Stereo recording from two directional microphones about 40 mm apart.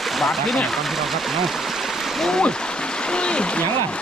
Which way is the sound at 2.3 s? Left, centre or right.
Centre.